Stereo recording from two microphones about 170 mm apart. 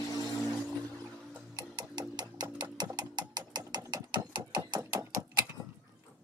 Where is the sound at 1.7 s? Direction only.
25° right (ahead or behind).